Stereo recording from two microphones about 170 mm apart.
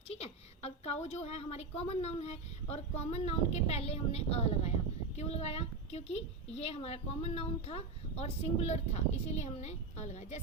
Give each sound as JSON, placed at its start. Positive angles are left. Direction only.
{"t": 0.1, "sound": "a woman's voice", "side_deg": 40}